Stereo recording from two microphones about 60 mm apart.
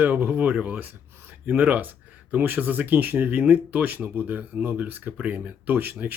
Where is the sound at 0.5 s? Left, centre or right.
Centre.